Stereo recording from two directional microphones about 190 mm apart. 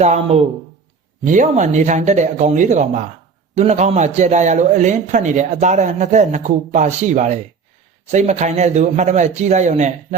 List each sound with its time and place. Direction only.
0.0 s a man's voice: 35° right (ahead or behind)